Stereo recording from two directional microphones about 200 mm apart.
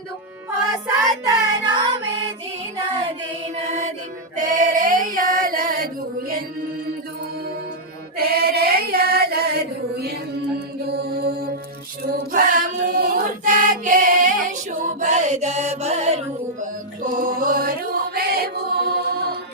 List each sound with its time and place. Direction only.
1.2 s child singing: 20° right (ahead or behind)
3.7 s music: 35° right (ahead or behind)
4.4 s female singing: 40° right (ahead or behind)
8.2 s carnatic music: 50° right (ahead or behind)
10.8 s mantra: 55° right (ahead or behind)
12.1 s chant: 45° right (ahead or behind)
17.0 s music: 45° right (ahead or behind)